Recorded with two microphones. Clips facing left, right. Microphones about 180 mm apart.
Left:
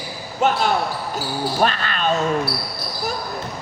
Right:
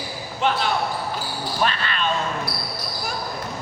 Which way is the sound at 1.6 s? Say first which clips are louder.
Left 2 dB; 45° left (ahead or behind).